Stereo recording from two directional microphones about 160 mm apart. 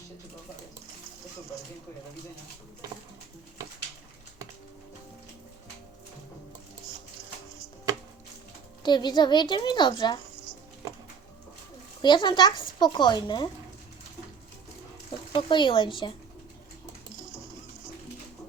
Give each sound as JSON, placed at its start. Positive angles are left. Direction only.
{"t": 8.8, "sound": "a woman's voice", "side_deg": 25}
{"t": 12.0, "sound": "a woman's voice", "side_deg": 30}
{"t": 15.3, "sound": "a woman's voice", "side_deg": 30}